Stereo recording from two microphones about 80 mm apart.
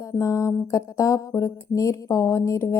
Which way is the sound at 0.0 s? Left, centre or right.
Left.